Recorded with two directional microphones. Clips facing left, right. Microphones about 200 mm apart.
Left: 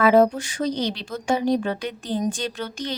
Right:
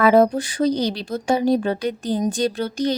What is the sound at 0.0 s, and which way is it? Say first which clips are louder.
A woman's voice: right 2 dB; 40° right (ahead or behind).